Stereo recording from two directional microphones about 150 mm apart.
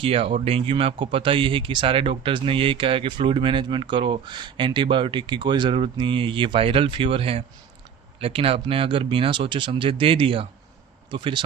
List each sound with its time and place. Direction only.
0.0 s speech: 40° right (ahead or behind)